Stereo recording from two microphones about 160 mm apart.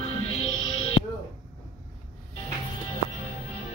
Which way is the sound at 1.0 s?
40° left (ahead or behind).